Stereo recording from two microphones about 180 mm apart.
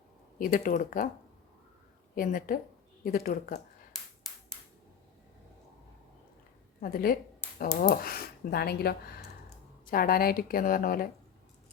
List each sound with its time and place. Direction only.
0.3 s a woman's voice: 50° left (ahead or behind)
2.1 s a woman's voice: 50° left (ahead or behind)
3.9 s a sound: centre (ahead or behind)
6.8 s a woman's voice: 55° left (ahead or behind)